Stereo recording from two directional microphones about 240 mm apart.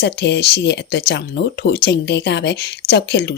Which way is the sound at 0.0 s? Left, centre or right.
Left.